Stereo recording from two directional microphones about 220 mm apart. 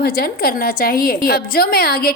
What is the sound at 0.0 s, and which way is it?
A woman's voice, 45° left (ahead or behind).